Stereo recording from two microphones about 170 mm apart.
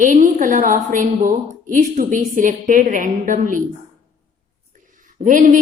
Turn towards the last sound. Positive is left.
turn(degrees=-50)  # may be behind; listen again after turning